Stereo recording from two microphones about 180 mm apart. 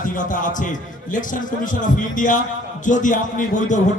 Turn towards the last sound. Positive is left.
turn(degrees=45)  # may be behind; listen again after turning